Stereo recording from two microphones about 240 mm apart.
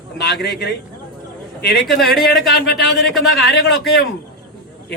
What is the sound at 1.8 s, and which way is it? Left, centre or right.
Speech, centre.